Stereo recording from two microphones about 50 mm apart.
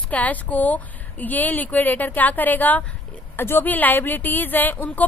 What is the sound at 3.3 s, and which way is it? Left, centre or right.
Speech, left.